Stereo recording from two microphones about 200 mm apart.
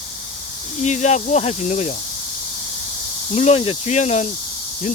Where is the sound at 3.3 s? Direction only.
30° left (ahead or behind).